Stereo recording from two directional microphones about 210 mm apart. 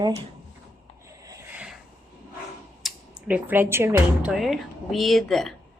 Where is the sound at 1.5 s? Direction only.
5° right (ahead or behind).